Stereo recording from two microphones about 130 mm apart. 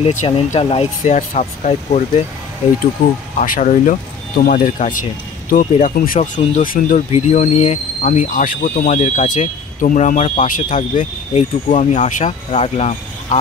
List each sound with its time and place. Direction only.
0.2 s speech: 45° left (ahead or behind); by 2.2 s 60° left (ahead or behind)
3.3 s speech: 80° left
7.1 s speech: 60° left (ahead or behind)